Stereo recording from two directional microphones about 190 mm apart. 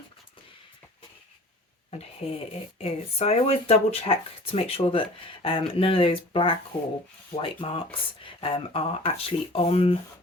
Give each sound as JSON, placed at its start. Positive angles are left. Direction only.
{"t": 2.2, "sound": "speech", "side_deg": 35}